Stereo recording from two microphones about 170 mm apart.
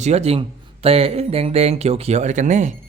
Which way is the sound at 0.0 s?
40° right (ahead or behind).